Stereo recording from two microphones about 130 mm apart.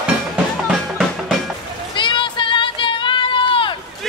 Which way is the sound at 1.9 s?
40° left (ahead or behind).